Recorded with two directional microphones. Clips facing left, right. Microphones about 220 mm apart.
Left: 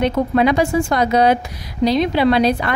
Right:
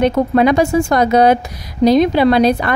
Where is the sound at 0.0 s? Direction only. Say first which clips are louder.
Right 3 dB; 45° right (ahead or behind).